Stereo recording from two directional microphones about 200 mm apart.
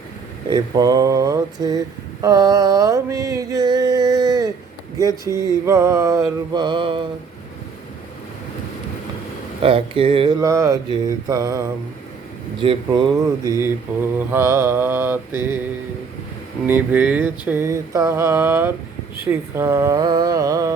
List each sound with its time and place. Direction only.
0.5 s mantra: 20° right (ahead or behind)
2.2 s a sound: 20° right (ahead or behind)
5.0 s mantra: 15° right (ahead or behind)
9.6 s mantra: 25° right (ahead or behind); by 15.5 s 10° right (ahead or behind)
16.6 s mantra: 10° right (ahead or behind)